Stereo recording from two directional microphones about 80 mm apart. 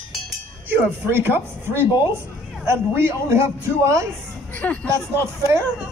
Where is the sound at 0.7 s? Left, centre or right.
Right.